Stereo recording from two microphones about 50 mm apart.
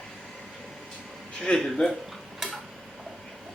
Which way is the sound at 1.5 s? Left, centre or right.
Left.